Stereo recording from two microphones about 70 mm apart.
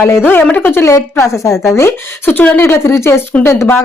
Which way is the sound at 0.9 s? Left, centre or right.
Left.